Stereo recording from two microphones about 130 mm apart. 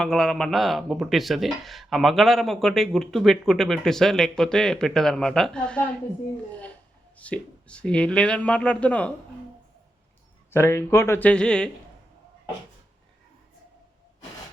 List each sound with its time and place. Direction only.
0.0 s speech: 5° left (ahead or behind)
7.2 s speech: 10° left (ahead or behind)
10.5 s speech: 20° left (ahead or behind)